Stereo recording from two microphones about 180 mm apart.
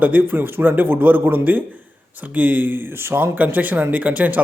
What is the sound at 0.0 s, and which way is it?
A man's voice, 10° right (ahead or behind).